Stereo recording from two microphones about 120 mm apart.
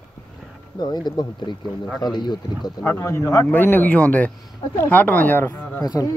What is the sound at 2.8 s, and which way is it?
Speech, 20° left (ahead or behind).